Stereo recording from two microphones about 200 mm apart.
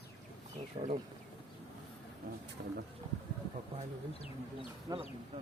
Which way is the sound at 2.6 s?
50° right (ahead or behind).